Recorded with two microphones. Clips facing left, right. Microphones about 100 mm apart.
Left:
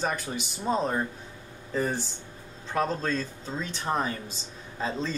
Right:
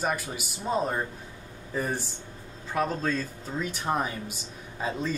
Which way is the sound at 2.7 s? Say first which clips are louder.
Even; 5° right (ahead or behind).